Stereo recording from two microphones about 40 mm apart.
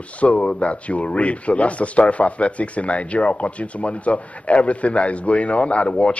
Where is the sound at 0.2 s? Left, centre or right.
Left.